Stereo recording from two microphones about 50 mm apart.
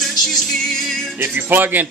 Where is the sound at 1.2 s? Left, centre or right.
Right.